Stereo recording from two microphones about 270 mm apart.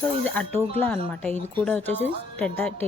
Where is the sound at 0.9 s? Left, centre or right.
Centre.